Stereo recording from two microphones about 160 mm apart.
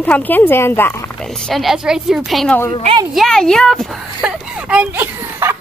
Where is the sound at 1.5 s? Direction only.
Centre (ahead or behind).